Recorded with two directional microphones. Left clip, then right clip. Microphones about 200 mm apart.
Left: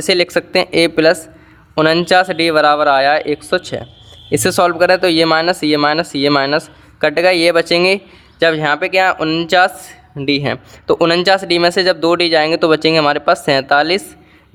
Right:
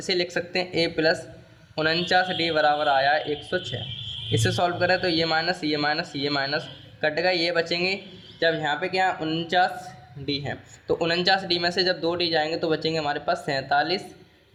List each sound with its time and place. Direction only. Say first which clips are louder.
0.0 s a man's voice: left 12 dB; 40° left (ahead or behind)